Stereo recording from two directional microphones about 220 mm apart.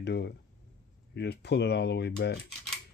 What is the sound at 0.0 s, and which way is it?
Speech, 50° left (ahead or behind).